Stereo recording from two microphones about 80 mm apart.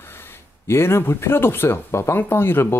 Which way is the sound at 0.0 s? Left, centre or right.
Left.